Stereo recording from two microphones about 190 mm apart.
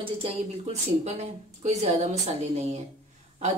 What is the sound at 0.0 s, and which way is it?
A woman's voice, 30° right (ahead or behind).